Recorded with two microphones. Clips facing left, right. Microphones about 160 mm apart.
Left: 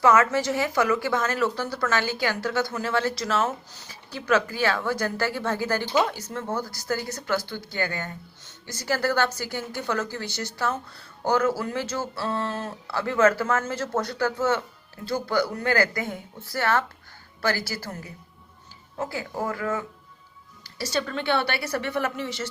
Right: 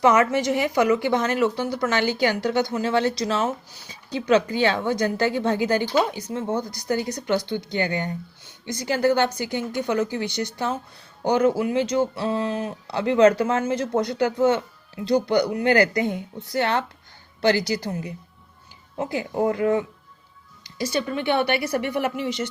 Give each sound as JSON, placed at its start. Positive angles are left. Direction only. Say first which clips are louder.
{"t": 0.0, "sound": "speech", "louder": "right 2 dB", "side_deg": -15}
{"t": 4.3, "sound": "speech", "louder": "right 4 dB", "side_deg": -20}